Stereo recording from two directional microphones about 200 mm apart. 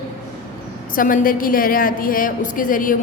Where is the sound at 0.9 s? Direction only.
45° left (ahead or behind).